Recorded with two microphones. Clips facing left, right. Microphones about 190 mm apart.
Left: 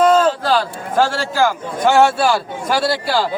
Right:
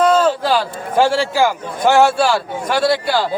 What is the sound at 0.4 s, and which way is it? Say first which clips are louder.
A man's voice: even; 15° right (ahead or behind).